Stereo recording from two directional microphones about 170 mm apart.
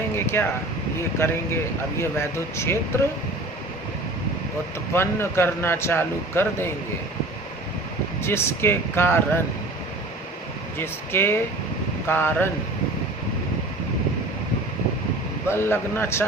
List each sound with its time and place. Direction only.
0.3 s speech: 15° left (ahead or behind)
4.9 s speech: 15° left (ahead or behind)
8.2 s speech: 15° left (ahead or behind)
10.8 s speech: 15° left (ahead or behind)
15.4 s speech: 15° left (ahead or behind)